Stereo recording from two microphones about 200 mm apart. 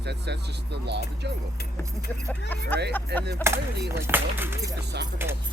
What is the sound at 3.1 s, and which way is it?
Speech, 55° right (ahead or behind).